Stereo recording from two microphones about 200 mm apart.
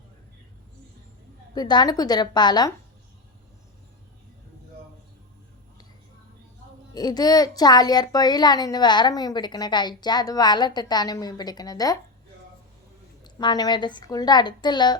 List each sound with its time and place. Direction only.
1.5 s speech: 20° left (ahead or behind)
6.9 s speech: 20° left (ahead or behind)
13.2 s speech: 20° left (ahead or behind)